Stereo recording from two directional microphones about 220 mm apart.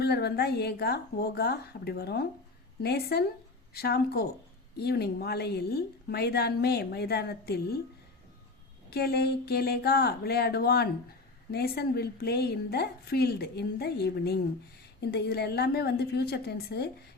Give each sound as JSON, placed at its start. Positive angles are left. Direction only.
{"t": 0.0, "sound": "a woman's voice", "side_deg": 45}
{"t": 8.9, "sound": "a woman's voice", "side_deg": 45}